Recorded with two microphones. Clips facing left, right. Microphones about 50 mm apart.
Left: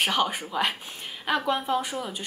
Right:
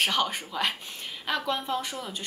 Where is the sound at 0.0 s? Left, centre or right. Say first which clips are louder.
Left 2 dB; centre.